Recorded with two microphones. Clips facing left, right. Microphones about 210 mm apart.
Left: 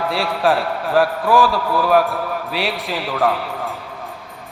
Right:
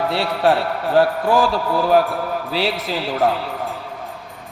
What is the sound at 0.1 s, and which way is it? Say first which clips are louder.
A man's voice: left 1 dB; 25° right (ahead or behind).